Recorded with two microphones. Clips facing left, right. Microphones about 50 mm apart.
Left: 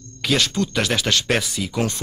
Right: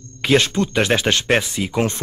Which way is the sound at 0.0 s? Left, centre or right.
Right.